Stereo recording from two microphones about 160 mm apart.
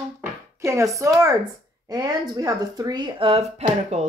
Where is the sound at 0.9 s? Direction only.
20° right (ahead or behind).